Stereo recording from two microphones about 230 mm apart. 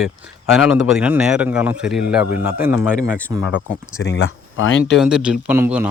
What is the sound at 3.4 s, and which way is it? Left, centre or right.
Speech, left.